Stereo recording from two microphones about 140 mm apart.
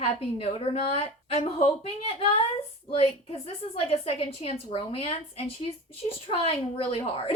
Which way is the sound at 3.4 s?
45° left (ahead or behind).